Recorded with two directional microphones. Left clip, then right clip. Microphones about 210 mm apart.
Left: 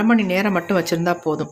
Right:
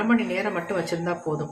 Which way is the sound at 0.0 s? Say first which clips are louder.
Left 5 dB; 50° left (ahead or behind).